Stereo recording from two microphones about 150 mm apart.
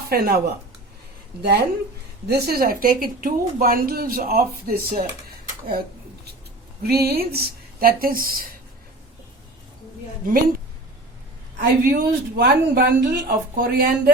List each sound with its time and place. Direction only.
0.1 s speech: 90° right; by 5.0 s 75° right (ahead or behind)
6.8 s speech: 90° right; by 8.4 s 70° right (ahead or behind)
10.2 s speech: 70° right (ahead or behind)
11.9 s speech: 85° right